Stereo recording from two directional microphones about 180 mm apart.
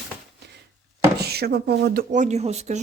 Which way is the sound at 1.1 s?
60° right (ahead or behind).